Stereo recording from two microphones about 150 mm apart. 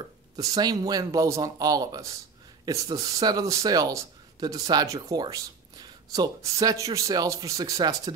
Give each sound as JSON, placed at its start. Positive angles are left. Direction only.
{"t": 0.4, "sound": "speech", "side_deg": -25}